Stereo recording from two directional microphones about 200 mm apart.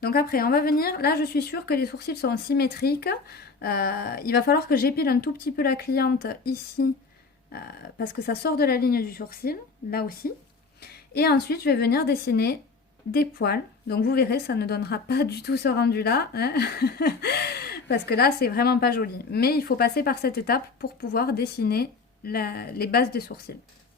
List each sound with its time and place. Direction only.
0.0 s speech: 50° left (ahead or behind)